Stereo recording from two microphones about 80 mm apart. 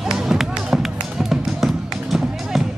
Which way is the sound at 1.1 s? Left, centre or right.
Centre.